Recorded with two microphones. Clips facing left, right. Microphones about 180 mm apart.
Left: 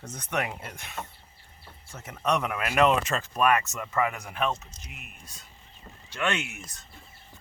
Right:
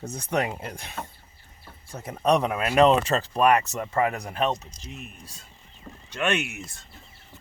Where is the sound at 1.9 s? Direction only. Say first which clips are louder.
Right 5 dB; 35° right (ahead or behind).